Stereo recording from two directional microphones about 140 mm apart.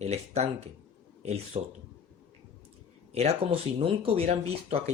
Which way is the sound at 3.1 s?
50° right (ahead or behind).